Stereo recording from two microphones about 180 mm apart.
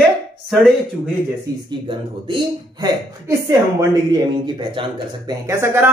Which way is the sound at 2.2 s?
25° right (ahead or behind).